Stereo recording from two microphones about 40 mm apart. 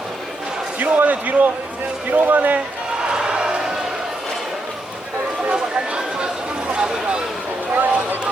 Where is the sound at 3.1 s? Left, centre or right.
Right.